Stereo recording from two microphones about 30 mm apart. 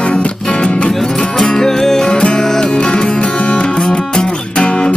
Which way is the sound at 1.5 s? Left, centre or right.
Centre.